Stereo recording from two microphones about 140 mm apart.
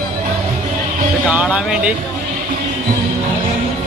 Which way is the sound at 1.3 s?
10° right (ahead or behind).